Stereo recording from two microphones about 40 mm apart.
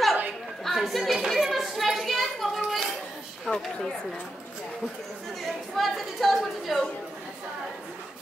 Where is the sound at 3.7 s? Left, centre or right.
Centre.